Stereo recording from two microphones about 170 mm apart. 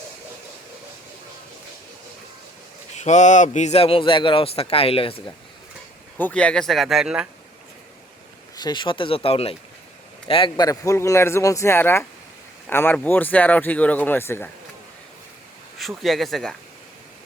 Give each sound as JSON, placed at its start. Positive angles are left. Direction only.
{"t": 2.9, "sound": "a man's voice", "side_deg": 45}
{"t": 6.1, "sound": "speech", "side_deg": 10}
{"t": 8.5, "sound": "a man's voice", "side_deg": 25}
{"t": 16.0, "sound": "speech", "side_deg": 0}